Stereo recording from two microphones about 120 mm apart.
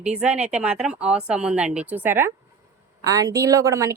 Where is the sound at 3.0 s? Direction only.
30° right (ahead or behind).